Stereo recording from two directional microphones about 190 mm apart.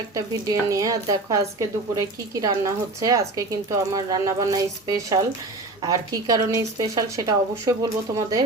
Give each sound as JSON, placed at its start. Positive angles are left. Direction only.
{"t": 0.1, "sound": "speech", "side_deg": -20}